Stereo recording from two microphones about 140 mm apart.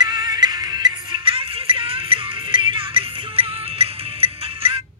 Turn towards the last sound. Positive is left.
turn(degrees=-40)  # may be behind; listen again after turning